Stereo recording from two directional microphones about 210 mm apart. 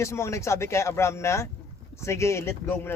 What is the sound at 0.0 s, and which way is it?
Speech, 15° left (ahead or behind).